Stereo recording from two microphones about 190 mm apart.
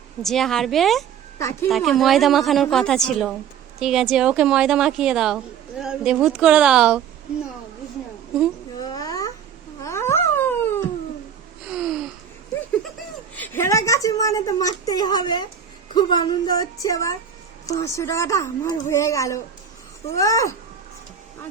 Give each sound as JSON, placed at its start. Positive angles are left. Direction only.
{"t": 0.2, "sound": "a woman's voice", "side_deg": 0}
{"t": 1.4, "sound": "a woman's voice", "side_deg": 15}
{"t": 1.7, "sound": "a woman's voice", "side_deg": 0}
{"t": 8.8, "sound": "babbling", "side_deg": 20}
{"t": 9.8, "sound": "a sound", "side_deg": 15}
{"t": 11.6, "sound": "gasp", "side_deg": -5}
{"t": 13.3, "sound": "a sound", "side_deg": 10}
{"t": 16.0, "sound": "a woman's voice", "side_deg": 25}